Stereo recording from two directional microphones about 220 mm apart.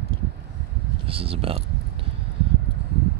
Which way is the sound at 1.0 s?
25° right (ahead or behind).